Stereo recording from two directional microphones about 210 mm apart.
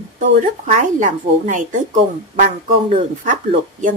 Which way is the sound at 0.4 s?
35° right (ahead or behind).